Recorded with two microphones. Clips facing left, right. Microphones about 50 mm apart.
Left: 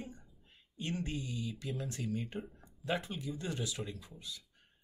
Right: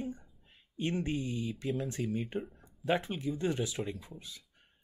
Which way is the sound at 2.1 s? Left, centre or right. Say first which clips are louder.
Right 4 dB; centre.